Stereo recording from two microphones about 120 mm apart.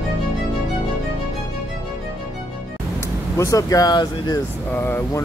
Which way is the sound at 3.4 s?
30° left (ahead or behind).